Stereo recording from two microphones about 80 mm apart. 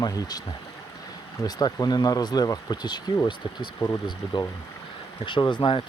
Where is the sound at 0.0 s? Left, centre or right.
Left.